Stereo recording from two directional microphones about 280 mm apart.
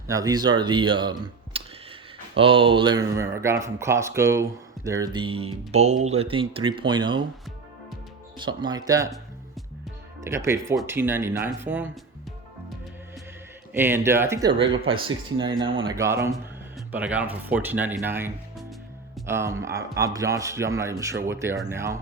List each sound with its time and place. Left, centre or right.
0.1 s speech: centre
8.4 s speech: centre
10.2 s speech: centre
13.7 s speech: centre